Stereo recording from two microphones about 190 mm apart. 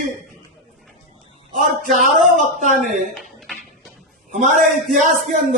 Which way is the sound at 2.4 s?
40° right (ahead or behind).